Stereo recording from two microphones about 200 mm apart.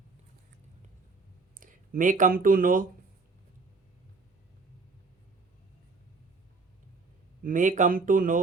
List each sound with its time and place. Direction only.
1.5 s speech: 40° right (ahead or behind)
7.4 s speech: 40° right (ahead or behind)